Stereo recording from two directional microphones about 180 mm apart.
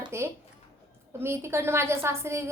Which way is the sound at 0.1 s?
15° right (ahead or behind).